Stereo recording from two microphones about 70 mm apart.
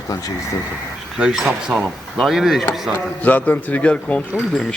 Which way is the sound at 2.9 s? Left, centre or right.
Left.